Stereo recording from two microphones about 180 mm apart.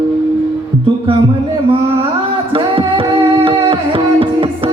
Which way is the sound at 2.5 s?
30° right (ahead or behind).